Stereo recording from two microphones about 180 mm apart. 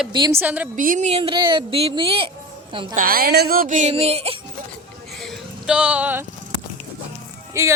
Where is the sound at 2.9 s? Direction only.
55° right (ahead or behind); by 4.4 s 35° right (ahead or behind).